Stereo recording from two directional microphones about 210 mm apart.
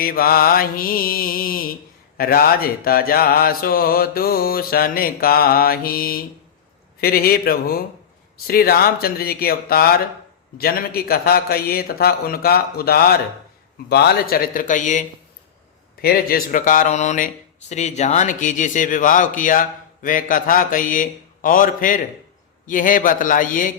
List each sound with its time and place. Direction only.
0.0 s mantra: 45° left (ahead or behind)
13.9 s speech: 50° left (ahead or behind)